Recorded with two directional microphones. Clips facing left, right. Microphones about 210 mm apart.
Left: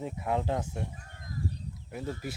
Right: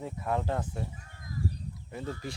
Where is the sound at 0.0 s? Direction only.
15° left (ahead or behind).